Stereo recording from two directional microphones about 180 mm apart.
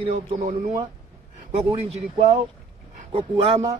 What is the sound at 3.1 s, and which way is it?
Speech, 30° right (ahead or behind).